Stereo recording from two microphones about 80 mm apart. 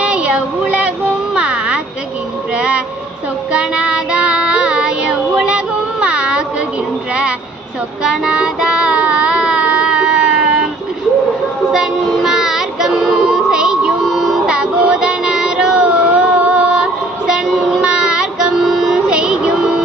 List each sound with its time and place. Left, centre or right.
0.0 s music: centre
3.5 s child singing: centre
8.0 s music: centre
11.7 s child singing: centre